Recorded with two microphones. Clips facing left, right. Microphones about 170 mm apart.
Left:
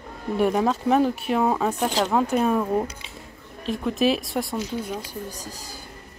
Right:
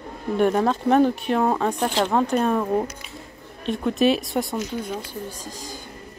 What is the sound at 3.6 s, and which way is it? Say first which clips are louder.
Speech: right 2 dB; centre (ahead or behind).